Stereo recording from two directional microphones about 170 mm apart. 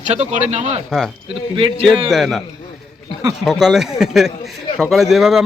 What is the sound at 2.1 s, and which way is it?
Speech, centre (ahead or behind).